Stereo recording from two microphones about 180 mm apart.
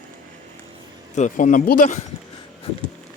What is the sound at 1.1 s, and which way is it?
Speech, 45° left (ahead or behind).